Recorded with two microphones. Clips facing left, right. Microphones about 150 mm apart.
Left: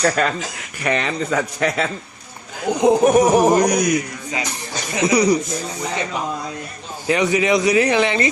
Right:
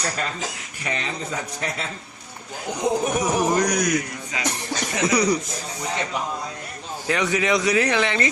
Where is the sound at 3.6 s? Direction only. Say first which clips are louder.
Left 5 dB; 20° left (ahead or behind).